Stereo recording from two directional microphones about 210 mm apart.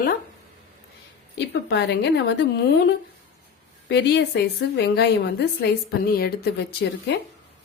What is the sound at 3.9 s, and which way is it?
A woman's voice, 55° left (ahead or behind).